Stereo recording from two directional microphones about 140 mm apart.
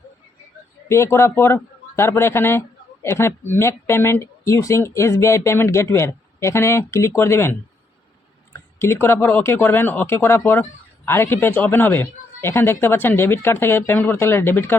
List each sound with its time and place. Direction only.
0.9 s speech: 20° left (ahead or behind)
8.8 s speech: 15° left (ahead or behind)